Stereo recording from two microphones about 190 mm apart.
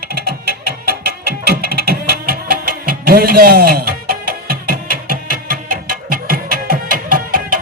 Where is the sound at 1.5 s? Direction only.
55° right (ahead or behind).